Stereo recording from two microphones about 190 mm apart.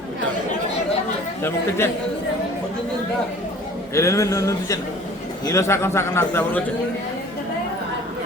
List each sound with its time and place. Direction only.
1.4 s a man's voice: 10° left (ahead or behind)
3.9 s a man's voice: 15° left (ahead or behind)